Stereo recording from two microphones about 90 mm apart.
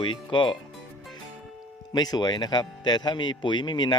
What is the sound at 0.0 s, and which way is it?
Speech, 65° left (ahead or behind).